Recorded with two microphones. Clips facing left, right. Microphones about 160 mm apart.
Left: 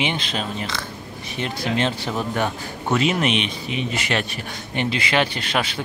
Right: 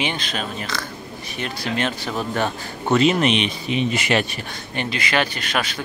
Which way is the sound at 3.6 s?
20° right (ahead or behind).